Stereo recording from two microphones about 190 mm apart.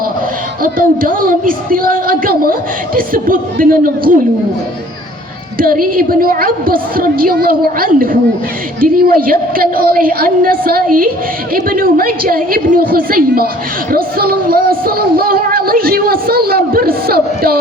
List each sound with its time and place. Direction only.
0.6 s music: 50° right (ahead or behind)
5.5 s music: 50° right (ahead or behind)